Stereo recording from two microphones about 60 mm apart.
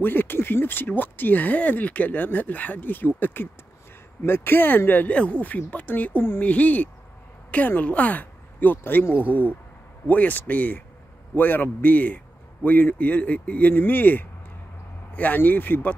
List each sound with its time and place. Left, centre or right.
0.0 s speech: left